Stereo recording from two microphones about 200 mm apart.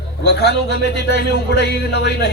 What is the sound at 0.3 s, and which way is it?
Speech, 55° left (ahead or behind).